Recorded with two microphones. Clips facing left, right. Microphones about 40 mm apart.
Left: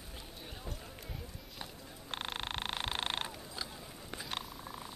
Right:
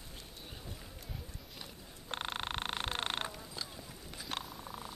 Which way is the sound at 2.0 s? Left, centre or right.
Centre.